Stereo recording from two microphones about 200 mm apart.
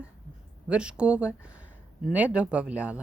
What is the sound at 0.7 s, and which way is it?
A woman's voice, 5° right (ahead or behind).